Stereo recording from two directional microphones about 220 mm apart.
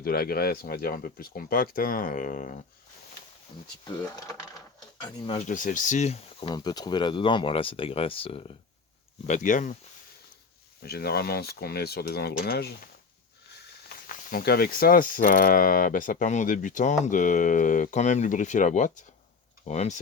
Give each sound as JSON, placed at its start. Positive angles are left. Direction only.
{"t": 0.0, "sound": "speech", "side_deg": 45}
{"t": 3.8, "sound": "speech", "side_deg": 15}
{"t": 5.2, "sound": "speech", "side_deg": 30}
{"t": 6.5, "sound": "speech", "side_deg": 20}
{"t": 10.8, "sound": "speech", "side_deg": 45}
{"t": 13.8, "sound": "speech", "side_deg": 40}